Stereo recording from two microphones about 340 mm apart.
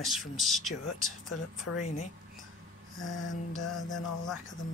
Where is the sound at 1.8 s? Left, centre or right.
Left.